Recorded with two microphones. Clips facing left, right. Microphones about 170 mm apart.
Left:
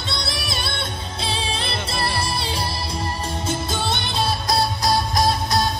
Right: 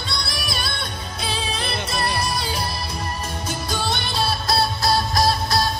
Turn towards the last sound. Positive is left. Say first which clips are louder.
# even
turn(degrees=20)  # may be behind; listen again after turning